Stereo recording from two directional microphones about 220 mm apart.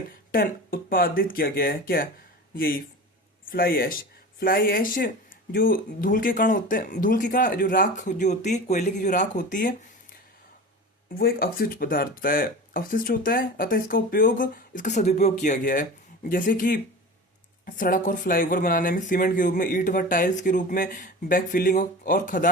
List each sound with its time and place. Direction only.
0.3 s speech: 40° left (ahead or behind)